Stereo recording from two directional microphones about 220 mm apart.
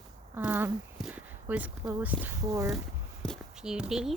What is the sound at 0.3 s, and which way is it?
Speech, 10° right (ahead or behind).